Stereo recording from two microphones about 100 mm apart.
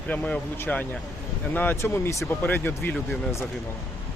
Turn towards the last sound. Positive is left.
turn(degrees=25)  # may be behind; listen again after turning